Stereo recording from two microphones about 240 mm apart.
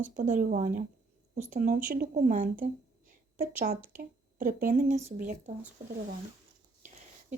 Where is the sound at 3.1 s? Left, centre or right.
Right.